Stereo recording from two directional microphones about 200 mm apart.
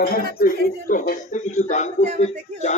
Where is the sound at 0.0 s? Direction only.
50° left (ahead or behind).